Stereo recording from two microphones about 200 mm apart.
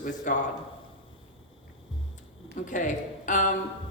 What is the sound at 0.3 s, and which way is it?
Speech, 40° left (ahead or behind).